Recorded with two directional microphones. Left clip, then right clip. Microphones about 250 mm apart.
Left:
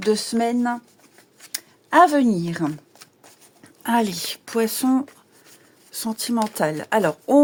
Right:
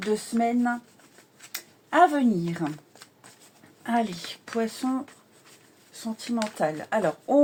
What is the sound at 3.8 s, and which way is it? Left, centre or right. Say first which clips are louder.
Speech: left 5 dB; left.